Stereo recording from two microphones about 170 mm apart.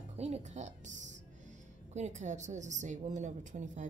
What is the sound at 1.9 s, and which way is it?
A woman's voice, 45° right (ahead or behind).